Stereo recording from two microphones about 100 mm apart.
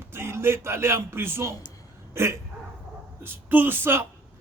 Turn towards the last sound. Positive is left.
turn(degrees=-20)  # may be behind; listen again after turning